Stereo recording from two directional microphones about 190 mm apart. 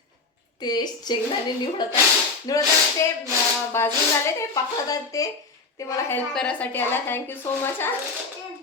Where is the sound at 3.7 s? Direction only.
15° left (ahead or behind).